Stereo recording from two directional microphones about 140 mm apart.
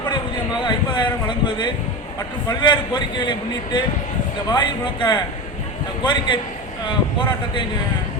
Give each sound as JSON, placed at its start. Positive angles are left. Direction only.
{"t": 0.6, "sound": "a man's voice", "side_deg": 35}